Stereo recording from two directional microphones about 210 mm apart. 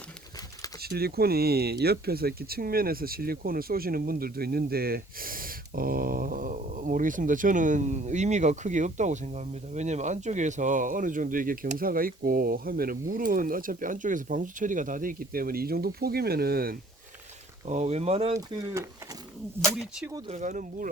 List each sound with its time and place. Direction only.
0.8 s speech: 50° right (ahead or behind)
17.7 s speech: 35° right (ahead or behind)
18.3 s speech: 15° right (ahead or behind)
19.6 s speech: centre (ahead or behind)
20.1 s speech: 30° right (ahead or behind)